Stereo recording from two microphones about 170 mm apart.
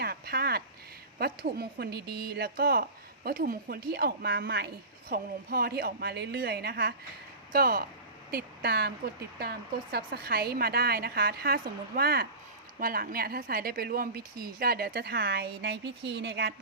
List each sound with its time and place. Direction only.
0.0 s a sound: 65° right (ahead or behind)
1.2 s a woman's voice: 65° right (ahead or behind)
8.3 s speech: 70° right (ahead or behind)
9.9 s a woman's voice: 60° right (ahead or behind)